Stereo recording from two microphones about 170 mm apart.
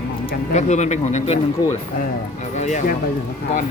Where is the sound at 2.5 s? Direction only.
45° left (ahead or behind).